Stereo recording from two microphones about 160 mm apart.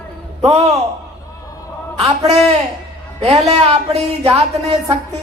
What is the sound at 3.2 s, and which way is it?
Speech, 40° right (ahead or behind).